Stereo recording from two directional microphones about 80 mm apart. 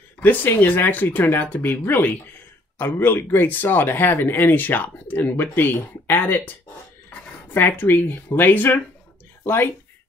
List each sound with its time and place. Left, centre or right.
0.2 s speech: left
7.5 s speech: left